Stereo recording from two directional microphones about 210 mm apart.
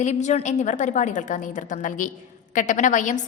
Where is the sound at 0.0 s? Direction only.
35° left (ahead or behind).